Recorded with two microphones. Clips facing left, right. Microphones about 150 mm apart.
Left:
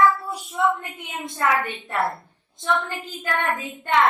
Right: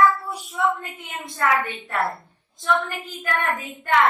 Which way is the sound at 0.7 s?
20° left (ahead or behind).